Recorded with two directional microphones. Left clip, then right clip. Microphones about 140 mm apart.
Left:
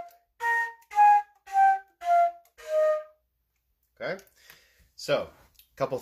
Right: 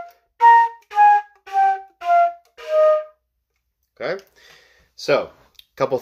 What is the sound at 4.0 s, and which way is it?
Speech, 20° right (ahead or behind).